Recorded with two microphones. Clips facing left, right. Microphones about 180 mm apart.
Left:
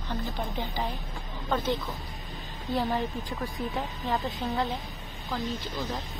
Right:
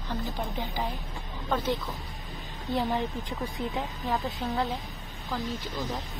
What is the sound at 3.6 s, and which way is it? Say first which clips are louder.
Speech: right 1 dB; 20° right (ahead or behind).